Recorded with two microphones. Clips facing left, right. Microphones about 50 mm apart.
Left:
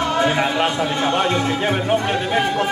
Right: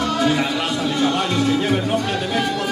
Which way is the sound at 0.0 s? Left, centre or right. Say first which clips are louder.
Left 1 dB; left.